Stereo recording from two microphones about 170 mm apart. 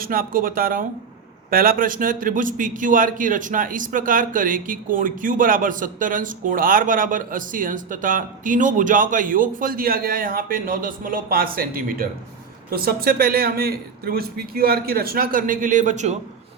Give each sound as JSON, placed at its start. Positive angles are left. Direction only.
{"t": 0.0, "sound": "a man's voice", "side_deg": -60}